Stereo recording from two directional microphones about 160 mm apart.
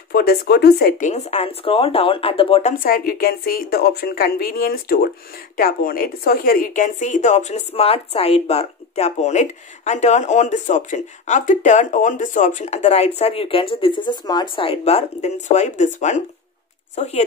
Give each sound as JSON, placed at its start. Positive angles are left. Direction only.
{"t": 0.1, "sound": "speech", "side_deg": 75}
{"t": 2.8, "sound": "a woman's voice", "side_deg": 65}